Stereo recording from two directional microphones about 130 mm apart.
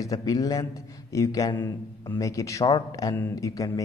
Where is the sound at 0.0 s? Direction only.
30° left (ahead or behind).